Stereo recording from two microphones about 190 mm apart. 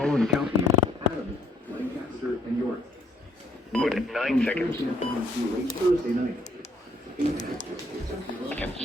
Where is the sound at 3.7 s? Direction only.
Centre (ahead or behind).